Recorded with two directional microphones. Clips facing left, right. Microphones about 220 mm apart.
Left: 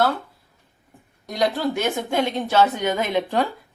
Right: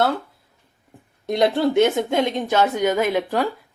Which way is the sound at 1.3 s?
25° right (ahead or behind).